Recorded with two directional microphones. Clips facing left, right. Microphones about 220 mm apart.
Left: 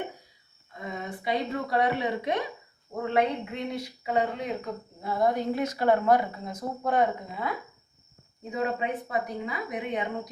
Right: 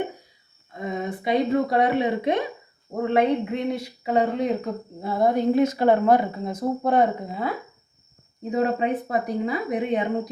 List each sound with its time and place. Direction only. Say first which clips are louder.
0.8 s speech: right 7 dB; 20° right (ahead or behind)
8.5 s speech: right 6 dB; 40° right (ahead or behind)